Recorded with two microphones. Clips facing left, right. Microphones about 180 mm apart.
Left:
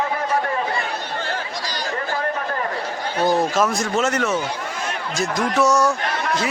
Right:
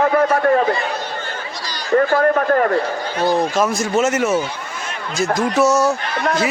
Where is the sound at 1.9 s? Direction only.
50° right (ahead or behind).